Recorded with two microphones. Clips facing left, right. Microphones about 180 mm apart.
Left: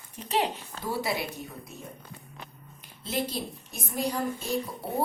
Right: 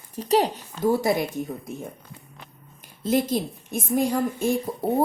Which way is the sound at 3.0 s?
45° right (ahead or behind).